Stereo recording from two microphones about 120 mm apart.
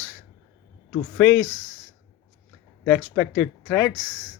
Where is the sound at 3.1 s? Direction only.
10° left (ahead or behind).